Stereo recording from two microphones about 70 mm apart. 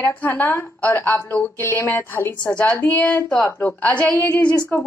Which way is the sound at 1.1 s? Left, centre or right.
Left.